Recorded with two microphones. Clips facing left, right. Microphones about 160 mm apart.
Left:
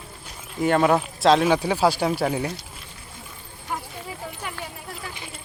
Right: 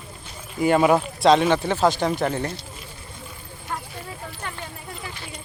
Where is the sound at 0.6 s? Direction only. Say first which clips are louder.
Right 2 dB; 5° right (ahead or behind).